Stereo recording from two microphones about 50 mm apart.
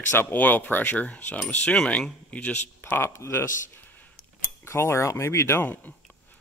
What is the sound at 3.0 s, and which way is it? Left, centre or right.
Speech, left.